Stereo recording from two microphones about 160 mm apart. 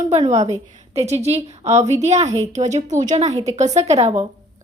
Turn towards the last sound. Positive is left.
turn(degrees=-45)  # may be behind; listen again after turning